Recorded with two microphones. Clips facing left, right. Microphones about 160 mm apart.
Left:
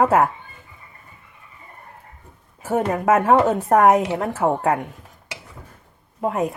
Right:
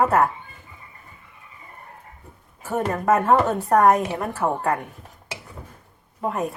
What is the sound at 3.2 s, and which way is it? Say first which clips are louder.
A woman's voice: left 3 dB; 15° left (ahead or behind).